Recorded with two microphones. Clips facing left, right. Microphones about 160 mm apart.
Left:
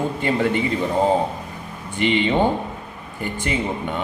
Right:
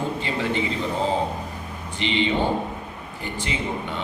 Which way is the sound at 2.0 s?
50° left (ahead or behind).